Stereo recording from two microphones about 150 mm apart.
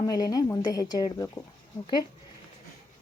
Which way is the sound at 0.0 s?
25° left (ahead or behind).